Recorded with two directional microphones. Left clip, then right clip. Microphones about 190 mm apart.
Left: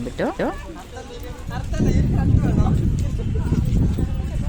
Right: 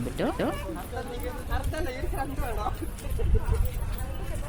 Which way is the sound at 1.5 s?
35° left (ahead or behind).